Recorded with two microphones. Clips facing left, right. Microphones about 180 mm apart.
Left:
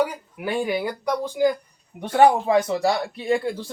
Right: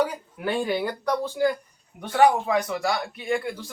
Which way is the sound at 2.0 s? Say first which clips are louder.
Left 3 dB; 25° left (ahead or behind).